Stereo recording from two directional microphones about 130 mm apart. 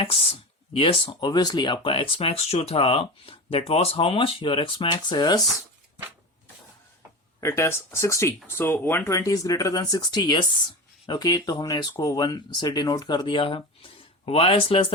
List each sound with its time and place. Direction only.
0.0 s speech: 45° left (ahead or behind)
1.3 s speech: 30° left (ahead or behind)
7.4 s speech: 20° left (ahead or behind); by 14.9 s 45° left (ahead or behind)